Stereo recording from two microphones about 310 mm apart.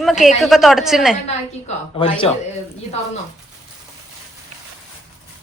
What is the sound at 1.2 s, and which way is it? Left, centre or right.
A woman's voice, centre.